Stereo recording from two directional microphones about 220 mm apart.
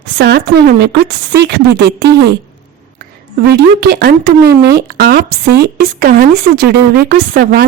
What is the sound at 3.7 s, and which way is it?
A woman's voice, 45° right (ahead or behind).